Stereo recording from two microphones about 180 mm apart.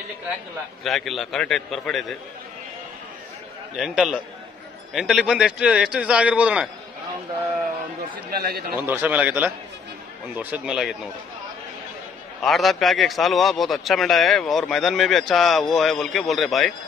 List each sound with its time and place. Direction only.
0.8 s a man's voice: centre (ahead or behind)
3.7 s a man's voice: 5° right (ahead or behind)
8.3 s a man's voice: 55° right (ahead or behind)
8.8 s a man's voice: 10° right (ahead or behind)
12.4 s a man's voice: centre (ahead or behind)